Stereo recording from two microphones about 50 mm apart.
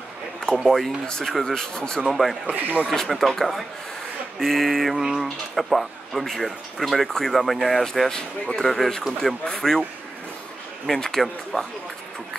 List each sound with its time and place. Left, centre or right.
0.6 s speech: centre
2.4 s speech: right
2.9 s speech: centre
4.9 s speech: centre
10.9 s speech: centre